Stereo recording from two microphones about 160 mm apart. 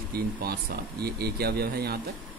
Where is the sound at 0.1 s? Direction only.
75° right (ahead or behind).